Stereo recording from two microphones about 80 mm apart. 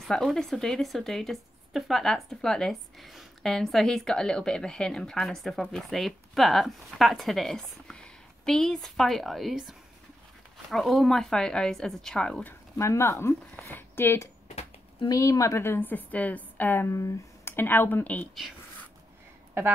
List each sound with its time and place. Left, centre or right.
0.2 s a woman's voice: centre
12.7 s a woman's voice: left
15.0 s a woman's voice: left
16.9 s speech: left; by 18.3 s centre